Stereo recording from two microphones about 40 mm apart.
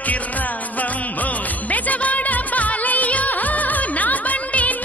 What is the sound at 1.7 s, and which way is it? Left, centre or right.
Music, left.